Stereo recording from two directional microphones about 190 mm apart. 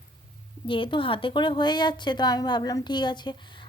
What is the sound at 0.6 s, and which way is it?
A woman's voice, 25° left (ahead or behind).